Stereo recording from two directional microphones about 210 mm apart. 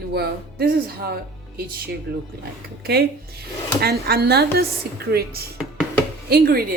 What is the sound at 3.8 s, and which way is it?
A woman's voice, 50° right (ahead or behind).